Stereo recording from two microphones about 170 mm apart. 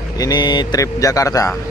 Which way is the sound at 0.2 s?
25° left (ahead or behind).